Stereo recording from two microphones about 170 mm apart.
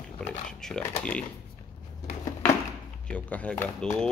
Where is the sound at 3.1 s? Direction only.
10° left (ahead or behind).